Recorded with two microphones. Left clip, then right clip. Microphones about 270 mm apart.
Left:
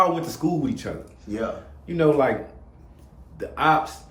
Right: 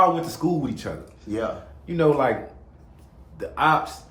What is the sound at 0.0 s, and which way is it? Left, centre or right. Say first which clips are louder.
Speech: right 2 dB; centre.